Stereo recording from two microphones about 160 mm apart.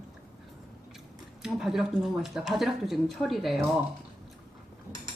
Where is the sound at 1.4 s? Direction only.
5° right (ahead or behind).